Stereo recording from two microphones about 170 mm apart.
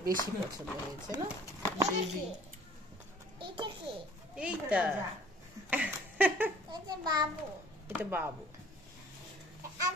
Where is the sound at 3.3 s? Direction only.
30° right (ahead or behind).